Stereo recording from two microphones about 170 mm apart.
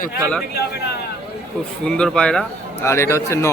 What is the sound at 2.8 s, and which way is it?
Speech, 15° left (ahead or behind).